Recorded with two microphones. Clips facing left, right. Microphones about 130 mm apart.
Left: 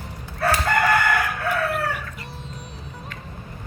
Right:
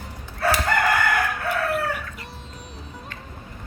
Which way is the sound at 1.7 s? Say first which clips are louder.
Right 1 dB; centre (ahead or behind).